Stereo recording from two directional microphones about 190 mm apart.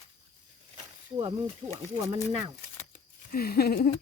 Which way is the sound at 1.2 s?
30° right (ahead or behind).